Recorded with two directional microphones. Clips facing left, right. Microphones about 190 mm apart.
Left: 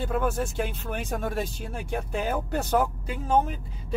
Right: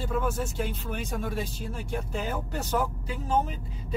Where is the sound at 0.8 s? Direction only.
50° left (ahead or behind).